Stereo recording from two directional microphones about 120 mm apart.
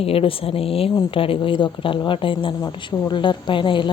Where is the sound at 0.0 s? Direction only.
50° left (ahead or behind).